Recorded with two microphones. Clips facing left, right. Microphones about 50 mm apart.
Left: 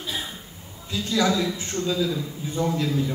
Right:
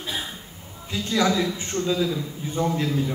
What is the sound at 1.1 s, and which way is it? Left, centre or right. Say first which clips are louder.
A man's voice: right 1 dB; right.